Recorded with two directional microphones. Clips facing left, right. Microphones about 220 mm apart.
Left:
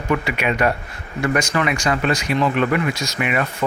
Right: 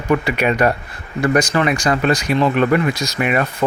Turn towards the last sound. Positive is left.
turn(degrees=-40)  # may be behind; listen again after turning